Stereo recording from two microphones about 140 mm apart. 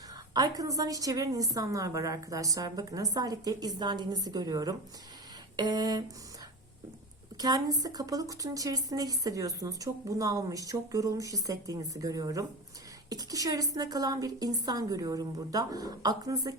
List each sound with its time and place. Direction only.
0.3 s a woman's voice: 25° right (ahead or behind)
7.3 s a woman's voice: 25° right (ahead or behind)